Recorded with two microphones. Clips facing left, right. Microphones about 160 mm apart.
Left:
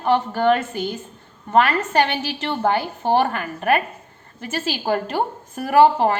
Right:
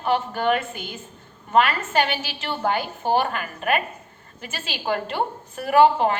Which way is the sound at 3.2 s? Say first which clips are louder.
Left 4 dB; 45° left (ahead or behind).